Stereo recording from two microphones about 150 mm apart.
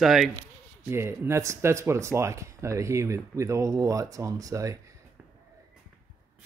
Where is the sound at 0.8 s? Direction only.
15° right (ahead or behind).